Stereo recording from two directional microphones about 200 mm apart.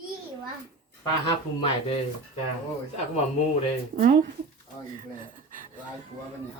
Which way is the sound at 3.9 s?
40° right (ahead or behind).